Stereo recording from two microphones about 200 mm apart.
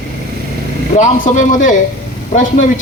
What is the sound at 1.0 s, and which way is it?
Speech, 40° left (ahead or behind).